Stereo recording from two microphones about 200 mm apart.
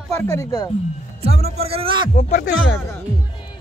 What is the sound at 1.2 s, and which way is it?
Speech, 30° right (ahead or behind).